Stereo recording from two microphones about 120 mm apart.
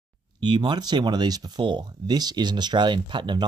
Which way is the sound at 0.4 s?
40° right (ahead or behind).